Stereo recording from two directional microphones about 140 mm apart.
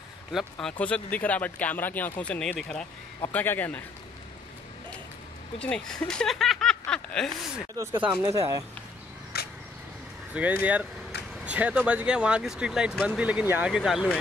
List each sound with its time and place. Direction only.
0.3 s speech: centre (ahead or behind)
5.6 s speech: 5° left (ahead or behind)
7.7 s speech: 15° right (ahead or behind)
9.3 s a sound: 90° left
10.3 s speech: 10° right (ahead or behind)